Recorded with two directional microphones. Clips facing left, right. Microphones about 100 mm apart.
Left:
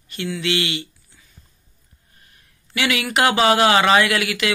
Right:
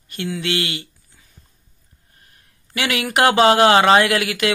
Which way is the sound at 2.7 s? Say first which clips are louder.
Even; 45° right (ahead or behind).